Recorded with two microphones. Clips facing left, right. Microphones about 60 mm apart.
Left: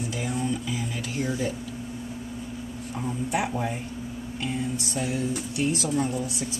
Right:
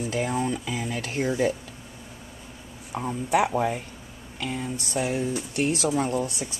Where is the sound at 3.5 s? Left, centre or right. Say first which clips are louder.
Right 4 dB; right.